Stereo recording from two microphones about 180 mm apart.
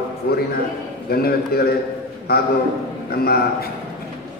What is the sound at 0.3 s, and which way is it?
A man's voice, 60° left (ahead or behind).